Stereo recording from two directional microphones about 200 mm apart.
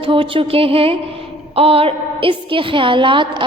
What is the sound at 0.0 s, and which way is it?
A woman's voice, 25° right (ahead or behind).